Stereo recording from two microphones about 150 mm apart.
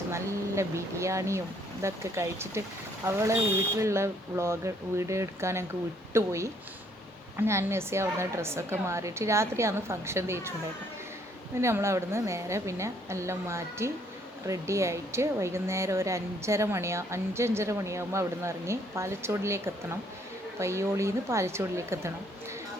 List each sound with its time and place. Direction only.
0.1 s a woman's voice: 20° right (ahead or behind)
11.6 s a woman's voice: 20° right (ahead or behind)